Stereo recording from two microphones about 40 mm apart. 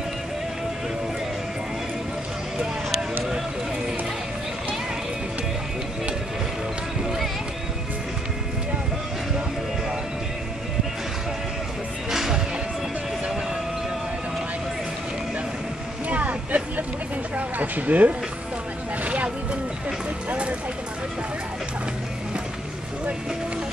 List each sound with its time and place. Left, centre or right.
12.1 s music: centre
16.1 s vehicle: right
17.4 s a sound: right